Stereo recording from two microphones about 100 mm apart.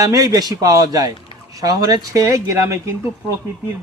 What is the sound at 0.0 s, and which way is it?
Speech, 35° right (ahead or behind).